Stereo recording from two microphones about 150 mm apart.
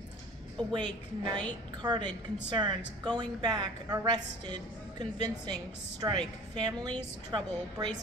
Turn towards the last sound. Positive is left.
turn(degrees=-30)  # may be behind; listen again after turning